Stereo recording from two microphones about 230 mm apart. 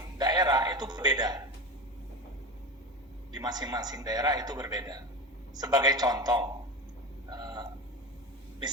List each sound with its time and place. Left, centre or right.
0.2 s music: centre
3.3 s a man's voice: centre
7.3 s a sound: centre